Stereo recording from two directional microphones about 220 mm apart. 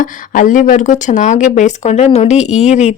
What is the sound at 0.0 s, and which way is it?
A woman's voice, 35° left (ahead or behind).